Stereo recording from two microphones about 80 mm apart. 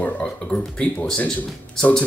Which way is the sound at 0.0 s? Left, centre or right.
Centre.